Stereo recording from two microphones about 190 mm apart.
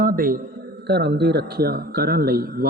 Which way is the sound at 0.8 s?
60° right (ahead or behind).